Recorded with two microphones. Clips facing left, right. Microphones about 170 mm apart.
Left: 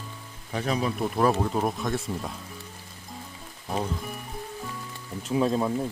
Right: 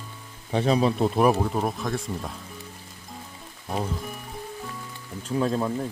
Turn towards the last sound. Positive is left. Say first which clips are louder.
# left 1 dB
turn(degrees=5)  # may be behind; listen again after turning